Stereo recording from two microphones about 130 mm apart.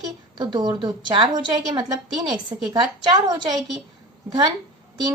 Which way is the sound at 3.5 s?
Centre (ahead or behind).